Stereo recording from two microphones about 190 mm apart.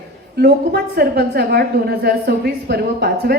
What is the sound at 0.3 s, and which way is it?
A woman's voice, 55° right (ahead or behind).